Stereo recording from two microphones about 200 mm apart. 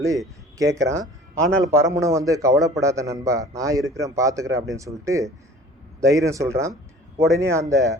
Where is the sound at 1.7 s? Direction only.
15° right (ahead or behind).